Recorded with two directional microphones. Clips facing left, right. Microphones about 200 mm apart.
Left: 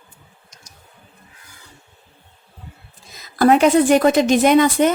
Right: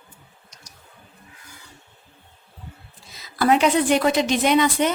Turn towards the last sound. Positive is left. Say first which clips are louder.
# left 5 dB
turn(degrees=50)  # may be behind; listen again after turning